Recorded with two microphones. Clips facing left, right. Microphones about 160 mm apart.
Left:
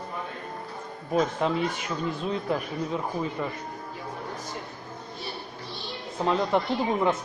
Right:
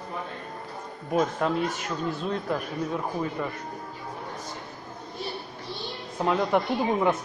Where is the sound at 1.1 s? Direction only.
Centre (ahead or behind).